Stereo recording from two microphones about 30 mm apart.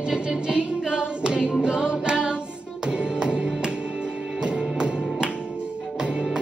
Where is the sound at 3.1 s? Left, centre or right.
Right.